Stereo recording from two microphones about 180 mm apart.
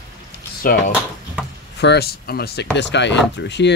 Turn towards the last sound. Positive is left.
turn(degrees=75)  # may be behind; listen again after turning